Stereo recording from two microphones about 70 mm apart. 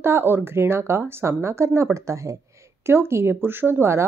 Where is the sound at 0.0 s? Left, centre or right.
Right.